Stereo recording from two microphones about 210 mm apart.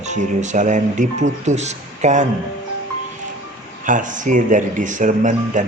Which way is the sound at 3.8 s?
40° right (ahead or behind).